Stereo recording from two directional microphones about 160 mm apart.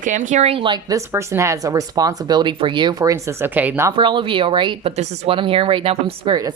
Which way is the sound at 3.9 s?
30° right (ahead or behind).